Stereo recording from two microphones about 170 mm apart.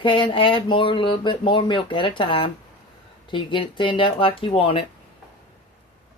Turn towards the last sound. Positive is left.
turn(degrees=30)  # may be behind; listen again after turning